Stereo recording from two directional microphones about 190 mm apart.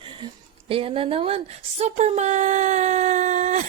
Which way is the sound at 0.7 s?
30° right (ahead or behind).